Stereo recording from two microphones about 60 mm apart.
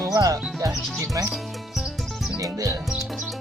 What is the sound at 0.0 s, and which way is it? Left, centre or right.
Music, right.